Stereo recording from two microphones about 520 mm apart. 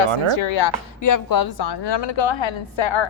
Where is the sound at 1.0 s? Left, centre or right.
Left.